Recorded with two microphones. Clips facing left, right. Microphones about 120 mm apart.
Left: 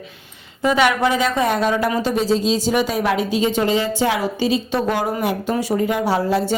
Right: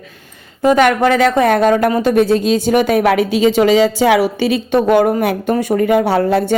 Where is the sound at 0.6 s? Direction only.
50° right (ahead or behind).